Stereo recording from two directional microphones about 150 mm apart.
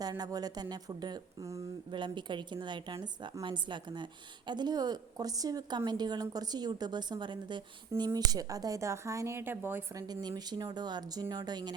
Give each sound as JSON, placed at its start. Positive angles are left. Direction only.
{"t": 0.0, "sound": "speech", "side_deg": -25}